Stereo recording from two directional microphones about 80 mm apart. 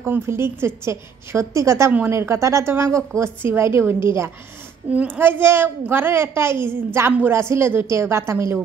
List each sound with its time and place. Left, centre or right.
0.0 s a woman's voice: right
4.9 s a woman's voice: right